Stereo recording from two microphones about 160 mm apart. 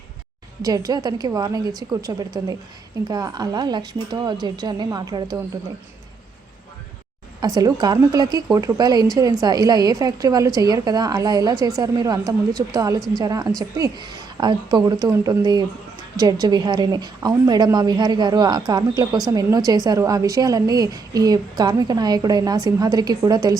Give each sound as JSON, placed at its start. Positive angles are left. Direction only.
{"t": 0.6, "sound": "a woman's voice", "side_deg": -25}
{"t": 7.4, "sound": "a woman's voice", "side_deg": -25}